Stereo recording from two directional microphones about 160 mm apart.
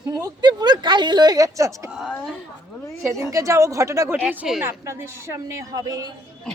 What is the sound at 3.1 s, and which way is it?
Speech, 20° right (ahead or behind).